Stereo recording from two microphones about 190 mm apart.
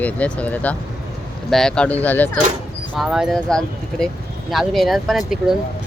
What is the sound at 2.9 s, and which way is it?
Speech, centre (ahead or behind).